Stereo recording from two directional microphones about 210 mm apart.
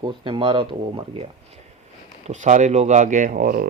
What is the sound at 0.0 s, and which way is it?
Speech, 25° right (ahead or behind).